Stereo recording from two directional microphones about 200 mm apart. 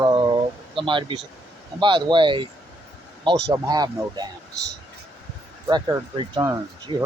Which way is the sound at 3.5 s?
20° right (ahead or behind).